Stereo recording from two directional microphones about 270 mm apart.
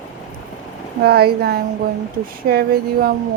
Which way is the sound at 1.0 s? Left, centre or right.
Right.